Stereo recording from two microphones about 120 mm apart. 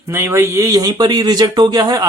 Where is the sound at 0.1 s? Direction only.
20° right (ahead or behind).